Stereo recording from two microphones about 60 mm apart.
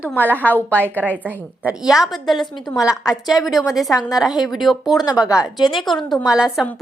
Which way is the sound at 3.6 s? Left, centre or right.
Left.